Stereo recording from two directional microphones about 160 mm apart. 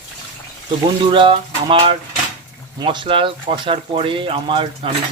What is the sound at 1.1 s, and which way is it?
Speech, 30° right (ahead or behind).